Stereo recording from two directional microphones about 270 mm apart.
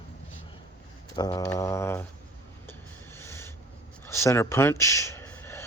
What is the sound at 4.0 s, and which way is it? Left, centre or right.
Speech, centre.